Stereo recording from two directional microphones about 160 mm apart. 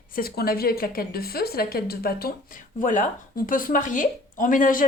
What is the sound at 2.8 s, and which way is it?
A woman's voice, 55° left (ahead or behind).